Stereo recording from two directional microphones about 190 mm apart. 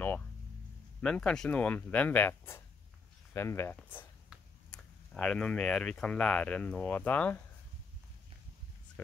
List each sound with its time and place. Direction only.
1.0 s speech: 5° left (ahead or behind)